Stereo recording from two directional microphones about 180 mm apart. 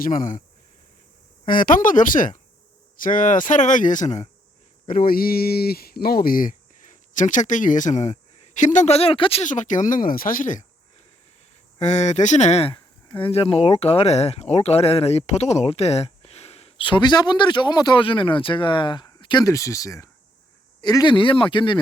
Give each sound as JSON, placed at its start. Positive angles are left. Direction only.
{"t": 0.0, "sound": "speech", "side_deg": 45}
{"t": 1.5, "sound": "speech", "side_deg": 50}
{"t": 4.9, "sound": "speech", "side_deg": 55}
{"t": 9.4, "sound": "speech", "side_deg": 45}
{"t": 11.8, "sound": "speech", "side_deg": 40}